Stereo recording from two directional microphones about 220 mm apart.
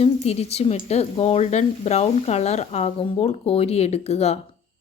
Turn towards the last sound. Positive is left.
turn(degrees=30)  # may be behind; listen again after turning